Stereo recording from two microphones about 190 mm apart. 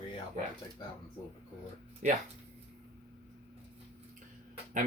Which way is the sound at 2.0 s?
40° right (ahead or behind).